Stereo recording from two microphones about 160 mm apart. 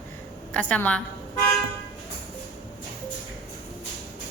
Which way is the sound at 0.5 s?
10° left (ahead or behind).